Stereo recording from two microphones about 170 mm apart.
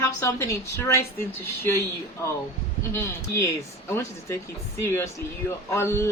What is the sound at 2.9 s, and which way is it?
Speech, 15° left (ahead or behind).